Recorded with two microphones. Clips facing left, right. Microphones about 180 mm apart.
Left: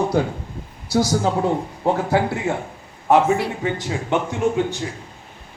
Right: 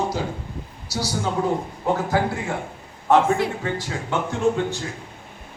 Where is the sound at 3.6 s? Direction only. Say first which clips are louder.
Left 3 dB; 20° left (ahead or behind).